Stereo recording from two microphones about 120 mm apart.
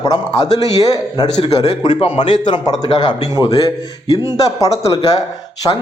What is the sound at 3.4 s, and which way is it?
Speech, 20° right (ahead or behind).